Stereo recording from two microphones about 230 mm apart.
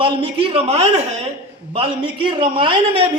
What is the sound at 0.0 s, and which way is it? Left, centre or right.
A man's voice, right.